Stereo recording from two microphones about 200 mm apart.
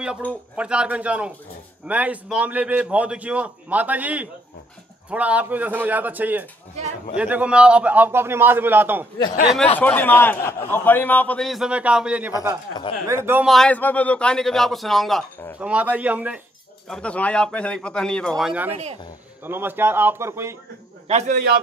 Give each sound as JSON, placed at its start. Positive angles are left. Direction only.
{"t": 0.0, "sound": "a man's voice", "side_deg": -5}
{"t": 9.8, "sound": "a man's voice", "side_deg": 10}
{"t": 13.5, "sound": "a man's voice", "side_deg": 5}
{"t": 16.8, "sound": "a man's voice", "side_deg": 5}
{"t": 21.1, "sound": "a man's voice", "side_deg": -35}